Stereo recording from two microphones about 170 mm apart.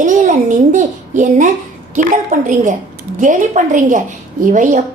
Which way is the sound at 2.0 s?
45° right (ahead or behind).